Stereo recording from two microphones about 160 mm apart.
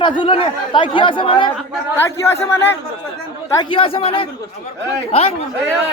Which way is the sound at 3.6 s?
35° left (ahead or behind).